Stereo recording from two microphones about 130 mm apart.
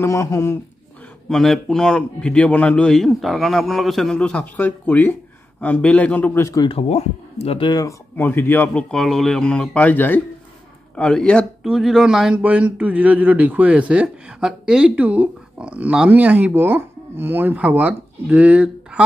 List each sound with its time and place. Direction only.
0.0 s speech: 20° left (ahead or behind)
1.3 s a man's voice: centre (ahead or behind)
6.5 s speech: 35° left (ahead or behind)
6.8 s speech: 55° left (ahead or behind)
8.2 s speech: 15° left (ahead or behind)
8.9 s speech: centre (ahead or behind)